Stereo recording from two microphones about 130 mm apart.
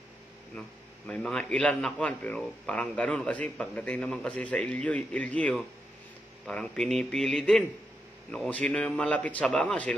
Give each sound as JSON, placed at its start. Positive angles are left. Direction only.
{"t": 0.6, "sound": "a man's voice", "side_deg": 5}